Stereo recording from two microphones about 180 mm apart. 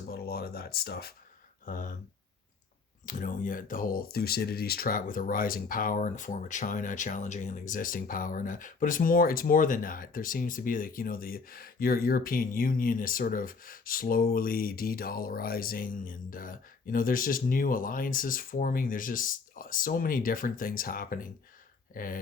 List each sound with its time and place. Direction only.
0.1 s a sound: 60° left (ahead or behind)
1.6 s speech: 50° left (ahead or behind)
3.1 s speech: 50° left (ahead or behind)